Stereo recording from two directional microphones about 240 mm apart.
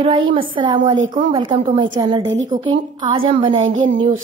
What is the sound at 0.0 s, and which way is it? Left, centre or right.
A woman's voice, right.